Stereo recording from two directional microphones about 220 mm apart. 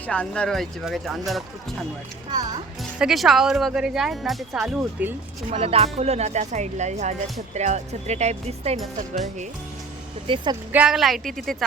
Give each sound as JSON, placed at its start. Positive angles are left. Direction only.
{"t": 0.1, "sound": "speech", "side_deg": 5}
{"t": 3.0, "sound": "speech", "side_deg": 0}
{"t": 5.5, "sound": "speech", "side_deg": -25}
{"t": 10.2, "sound": "speech", "side_deg": -20}
{"t": 10.7, "sound": "speech", "side_deg": -5}